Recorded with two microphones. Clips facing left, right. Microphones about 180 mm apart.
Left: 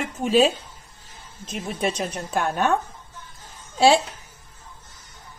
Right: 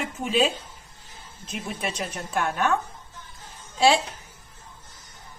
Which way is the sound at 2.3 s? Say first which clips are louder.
Left 2 dB; 35° left (ahead or behind).